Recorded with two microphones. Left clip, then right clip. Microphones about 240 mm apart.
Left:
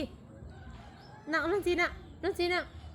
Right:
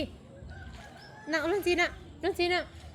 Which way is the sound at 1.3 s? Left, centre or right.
Centre.